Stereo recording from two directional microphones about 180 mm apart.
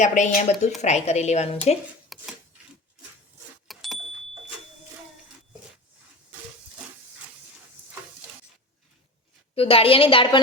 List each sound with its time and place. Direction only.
0.0 s speech: 40° left (ahead or behind)
2.1 s a sound: centre (ahead or behind)
3.7 s vehicle: centre (ahead or behind)
9.6 s speech: 30° left (ahead or behind)